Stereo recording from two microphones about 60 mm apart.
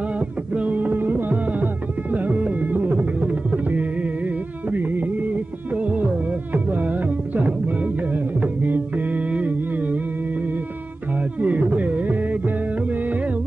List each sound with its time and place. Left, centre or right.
0.6 s music: right
11.4 s music: right